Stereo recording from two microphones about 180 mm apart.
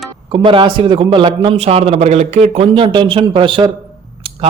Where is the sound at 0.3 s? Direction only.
25° right (ahead or behind).